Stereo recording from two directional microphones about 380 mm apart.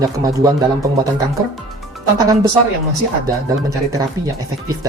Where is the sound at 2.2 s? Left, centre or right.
Centre.